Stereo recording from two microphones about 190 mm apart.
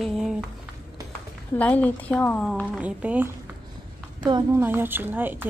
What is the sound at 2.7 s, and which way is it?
Speech, 10° right (ahead or behind).